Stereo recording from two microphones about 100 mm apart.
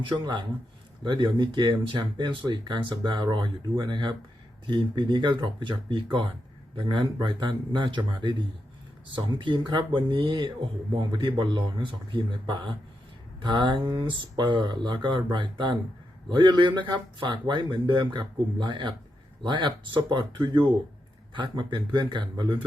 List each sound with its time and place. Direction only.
0.0 s speech: 55° right (ahead or behind)